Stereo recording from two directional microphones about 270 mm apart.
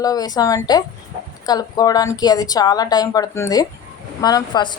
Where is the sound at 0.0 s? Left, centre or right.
Centre.